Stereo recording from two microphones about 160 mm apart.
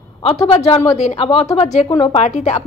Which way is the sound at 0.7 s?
45° left (ahead or behind).